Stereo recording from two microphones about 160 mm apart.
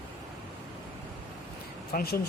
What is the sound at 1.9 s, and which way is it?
Speech, 75° left (ahead or behind).